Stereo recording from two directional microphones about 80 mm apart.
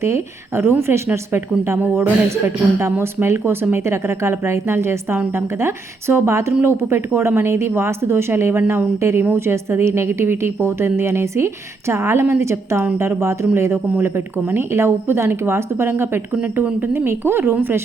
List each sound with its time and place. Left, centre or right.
0.0 s a woman's voice: right